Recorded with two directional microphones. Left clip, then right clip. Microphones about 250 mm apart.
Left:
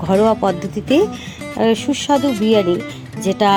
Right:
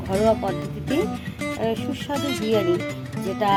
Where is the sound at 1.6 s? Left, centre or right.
Left.